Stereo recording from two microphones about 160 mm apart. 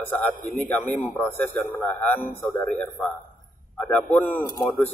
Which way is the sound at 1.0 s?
15° left (ahead or behind).